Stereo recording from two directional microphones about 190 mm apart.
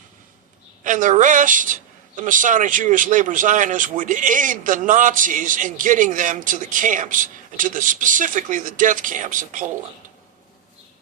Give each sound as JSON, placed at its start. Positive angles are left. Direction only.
{"t": 0.9, "sound": "a woman's voice", "side_deg": -45}